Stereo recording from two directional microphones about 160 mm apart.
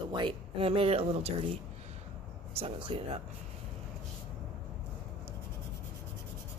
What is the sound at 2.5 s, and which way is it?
Speech, 35° right (ahead or behind).